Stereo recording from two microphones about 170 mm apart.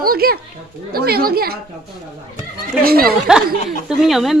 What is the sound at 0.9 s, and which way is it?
Speech, 65° right (ahead or behind).